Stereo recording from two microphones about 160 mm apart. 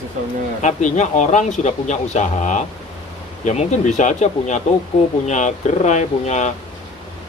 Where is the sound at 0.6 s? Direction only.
50° left (ahead or behind).